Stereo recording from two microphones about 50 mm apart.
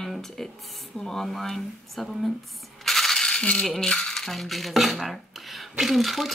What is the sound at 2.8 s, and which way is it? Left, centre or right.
Rattle, centre.